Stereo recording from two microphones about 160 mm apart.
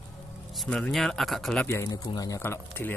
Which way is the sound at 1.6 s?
20° left (ahead or behind).